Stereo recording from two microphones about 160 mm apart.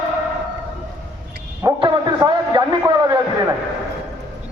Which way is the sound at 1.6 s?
25° right (ahead or behind).